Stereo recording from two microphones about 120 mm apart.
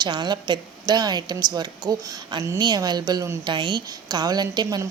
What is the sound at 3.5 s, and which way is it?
A woman's voice, 40° right (ahead or behind).